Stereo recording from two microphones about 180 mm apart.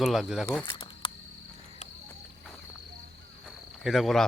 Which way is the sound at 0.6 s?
25° left (ahead or behind).